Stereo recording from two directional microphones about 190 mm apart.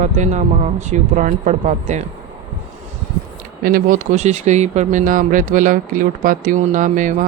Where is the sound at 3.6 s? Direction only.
45° right (ahead or behind).